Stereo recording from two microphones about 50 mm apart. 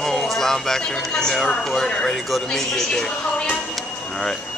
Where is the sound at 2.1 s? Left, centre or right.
Centre.